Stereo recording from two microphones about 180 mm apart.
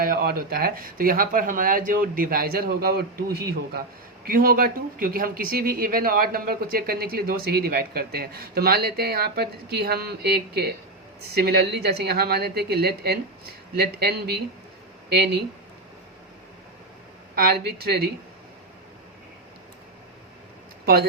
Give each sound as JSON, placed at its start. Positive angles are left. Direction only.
{"t": 0.0, "sound": "speech", "side_deg": -55}
{"t": 4.3, "sound": "speech", "side_deg": -55}
{"t": 17.3, "sound": "speech", "side_deg": -55}
{"t": 20.8, "sound": "speech", "side_deg": -60}